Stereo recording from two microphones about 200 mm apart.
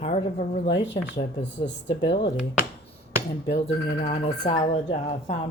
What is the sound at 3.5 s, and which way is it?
Speech, 30° left (ahead or behind).